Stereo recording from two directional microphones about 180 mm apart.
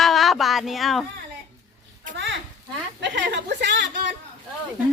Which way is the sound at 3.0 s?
75° right (ahead or behind).